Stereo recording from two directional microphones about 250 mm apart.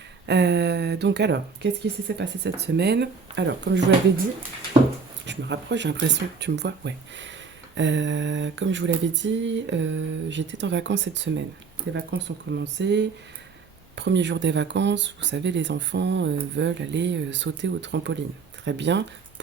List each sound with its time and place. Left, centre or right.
0.3 s speech: right
5.2 s speech: right